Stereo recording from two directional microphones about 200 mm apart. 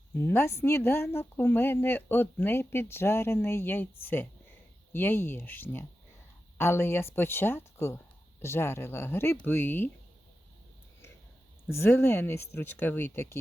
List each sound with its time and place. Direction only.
0.1 s speech: 10° left (ahead or behind)
11.7 s speech: 10° left (ahead or behind)